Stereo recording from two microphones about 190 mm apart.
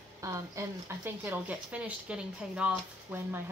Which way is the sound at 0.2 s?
15° right (ahead or behind).